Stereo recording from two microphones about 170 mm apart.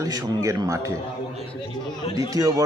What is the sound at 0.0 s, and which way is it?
Speech, 20° right (ahead or behind).